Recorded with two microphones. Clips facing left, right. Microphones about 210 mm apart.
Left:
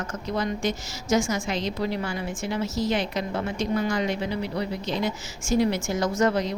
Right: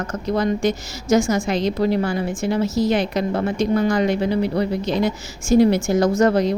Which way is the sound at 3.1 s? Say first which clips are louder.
Right 7 dB; 50° right (ahead or behind).